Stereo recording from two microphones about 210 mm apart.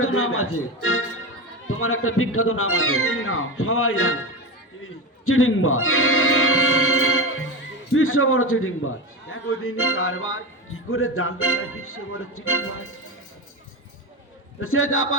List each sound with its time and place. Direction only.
0.0 s speech: 80° left
5.2 s speech: 80° left
14.6 s speech: 80° left